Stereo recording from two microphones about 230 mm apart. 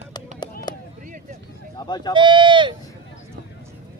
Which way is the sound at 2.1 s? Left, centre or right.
Right.